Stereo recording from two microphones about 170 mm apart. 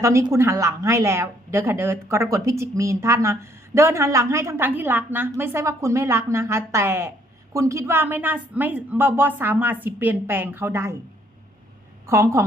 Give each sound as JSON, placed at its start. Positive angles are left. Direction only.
{"t": 0.0, "sound": "a woman's voice", "side_deg": -15}
{"t": 12.0, "sound": "a woman's voice", "side_deg": -15}